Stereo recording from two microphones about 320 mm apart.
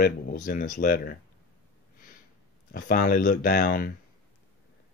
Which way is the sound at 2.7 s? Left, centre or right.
Left.